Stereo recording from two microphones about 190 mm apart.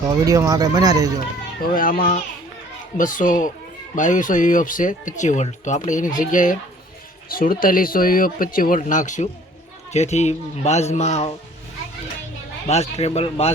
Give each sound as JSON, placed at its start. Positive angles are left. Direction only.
{"t": 0.3, "sound": "speech", "side_deg": -20}
{"t": 1.6, "sound": "a man's voice", "side_deg": 45}
{"t": 12.6, "sound": "a man's voice", "side_deg": 35}